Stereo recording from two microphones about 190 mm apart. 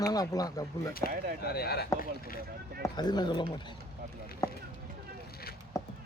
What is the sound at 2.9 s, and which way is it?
Speech, 20° left (ahead or behind).